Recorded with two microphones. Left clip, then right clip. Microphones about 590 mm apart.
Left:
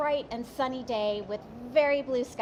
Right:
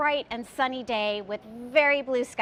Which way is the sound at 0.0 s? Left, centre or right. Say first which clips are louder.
Right 3 dB; right.